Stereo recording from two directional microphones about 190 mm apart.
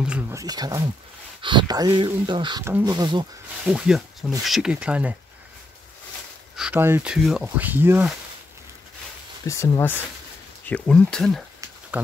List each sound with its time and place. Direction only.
0.0 s a sound: 5° right (ahead or behind)
0.4 s speech: 20° right (ahead or behind)
3.6 s speech: 5° right (ahead or behind)
6.5 s speech: 5° right (ahead or behind)
9.5 s speech: 15° left (ahead or behind)
11.9 s a sound: 10° right (ahead or behind)